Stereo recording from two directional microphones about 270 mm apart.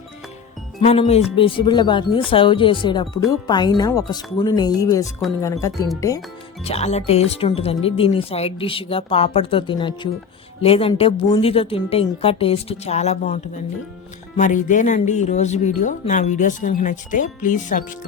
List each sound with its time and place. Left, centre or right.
0.8 s speech: left
6.7 s speech: left